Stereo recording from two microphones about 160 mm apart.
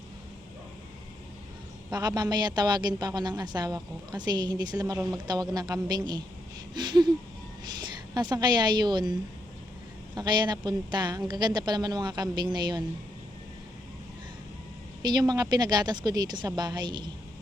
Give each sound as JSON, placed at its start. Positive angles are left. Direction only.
{"t": 1.9, "sound": "a woman's voice", "side_deg": -25}
{"t": 8.1, "sound": "a woman's voice", "side_deg": -25}
{"t": 10.2, "sound": "a woman's voice", "side_deg": -25}
{"t": 15.0, "sound": "a woman's voice", "side_deg": -25}